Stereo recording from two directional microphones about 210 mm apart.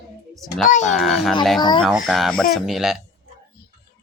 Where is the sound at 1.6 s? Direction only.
20° left (ahead or behind).